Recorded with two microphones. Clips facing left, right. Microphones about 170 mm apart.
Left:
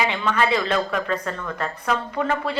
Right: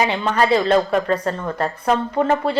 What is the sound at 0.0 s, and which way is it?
Speech, 40° right (ahead or behind).